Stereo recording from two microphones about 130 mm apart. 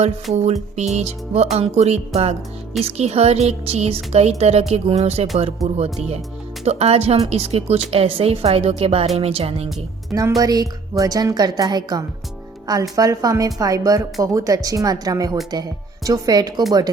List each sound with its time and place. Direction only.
0.3 s speech: 60° right (ahead or behind)
10.1 s speech: 25° right (ahead or behind)